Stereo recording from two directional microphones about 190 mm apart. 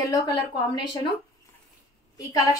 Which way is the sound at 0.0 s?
20° left (ahead or behind).